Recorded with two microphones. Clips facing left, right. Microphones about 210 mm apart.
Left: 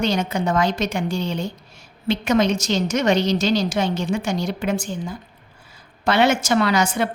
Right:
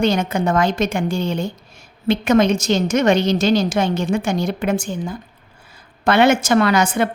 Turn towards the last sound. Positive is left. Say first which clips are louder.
# right 3 dB
turn(degrees=-55)  # may be behind; listen again after turning